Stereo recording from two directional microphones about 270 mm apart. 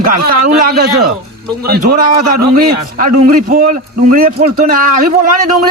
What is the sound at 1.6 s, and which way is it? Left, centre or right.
A man's voice, right.